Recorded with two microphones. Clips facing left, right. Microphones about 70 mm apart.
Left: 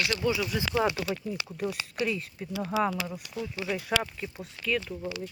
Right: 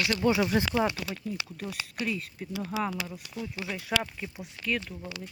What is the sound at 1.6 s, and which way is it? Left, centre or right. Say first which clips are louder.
Speech: left 6 dB; centre.